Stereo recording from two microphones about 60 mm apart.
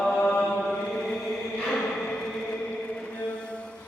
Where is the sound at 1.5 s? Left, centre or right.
Centre.